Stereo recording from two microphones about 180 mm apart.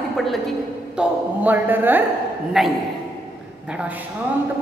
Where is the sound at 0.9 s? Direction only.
5° right (ahead or behind).